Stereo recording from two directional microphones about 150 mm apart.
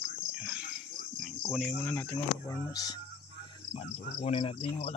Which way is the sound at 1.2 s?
Centre (ahead or behind).